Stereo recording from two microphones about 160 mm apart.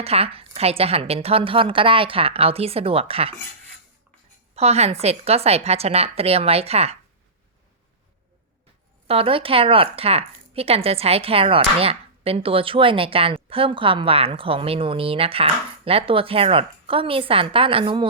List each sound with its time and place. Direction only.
0.0 s speech: 40° right (ahead or behind)
4.5 s speech: 40° right (ahead or behind)
9.0 s speech: 35° right (ahead or behind)